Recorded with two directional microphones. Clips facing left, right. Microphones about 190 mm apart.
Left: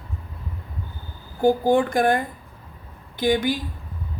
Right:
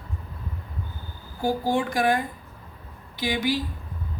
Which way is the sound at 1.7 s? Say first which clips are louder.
Left 4 dB; 50° left (ahead or behind).